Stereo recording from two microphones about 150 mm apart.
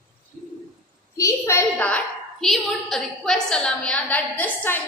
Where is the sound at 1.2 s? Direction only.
20° left (ahead or behind).